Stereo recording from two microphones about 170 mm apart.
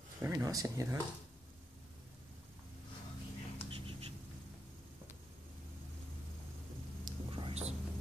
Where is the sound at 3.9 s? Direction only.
35° right (ahead or behind).